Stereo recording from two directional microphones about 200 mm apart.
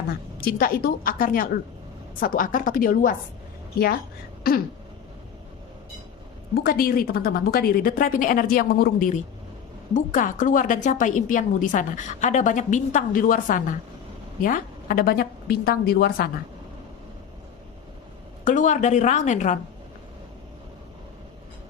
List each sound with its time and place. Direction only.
0.3 s a woman's voice: 45° left (ahead or behind)
4.4 s a woman's voice: 50° left (ahead or behind)
6.5 s a woman's voice: 50° left (ahead or behind)
18.4 s a woman's voice: 40° left (ahead or behind)